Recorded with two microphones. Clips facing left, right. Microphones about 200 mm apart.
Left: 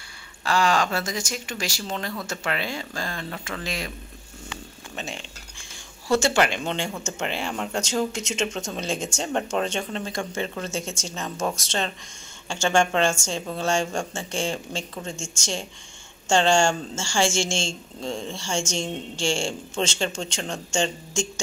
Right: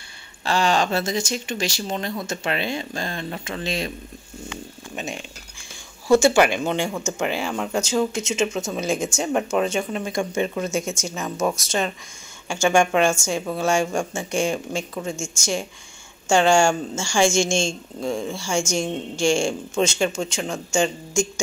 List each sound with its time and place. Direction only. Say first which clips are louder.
0.5 s speech: right 2 dB; 25° right (ahead or behind)
4.9 s a woman's voice: right 4 dB; 15° right (ahead or behind)